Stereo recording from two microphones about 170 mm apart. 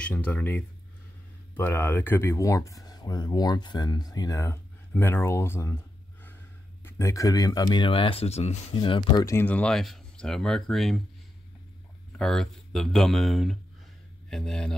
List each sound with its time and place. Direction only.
0.0 s speech: 10° left (ahead or behind)
6.8 s speech: 15° left (ahead or behind)
12.2 s speech: centre (ahead or behind)